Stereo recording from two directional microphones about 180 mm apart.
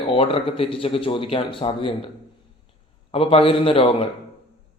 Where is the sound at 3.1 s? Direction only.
30° left (ahead or behind).